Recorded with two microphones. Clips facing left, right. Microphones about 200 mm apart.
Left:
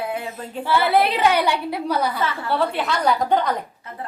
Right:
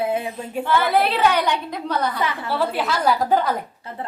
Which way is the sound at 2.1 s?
15° right (ahead or behind).